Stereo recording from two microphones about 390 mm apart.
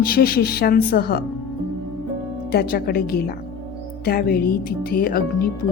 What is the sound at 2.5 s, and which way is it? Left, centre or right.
A woman's voice, left.